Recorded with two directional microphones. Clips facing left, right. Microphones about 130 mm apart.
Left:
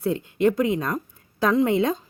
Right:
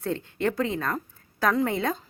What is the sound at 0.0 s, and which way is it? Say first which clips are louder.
Speech: left 6 dB; 10° left (ahead or behind).